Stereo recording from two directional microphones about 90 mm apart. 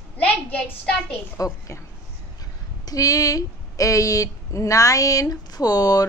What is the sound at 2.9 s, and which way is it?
A woman's voice, 40° left (ahead or behind).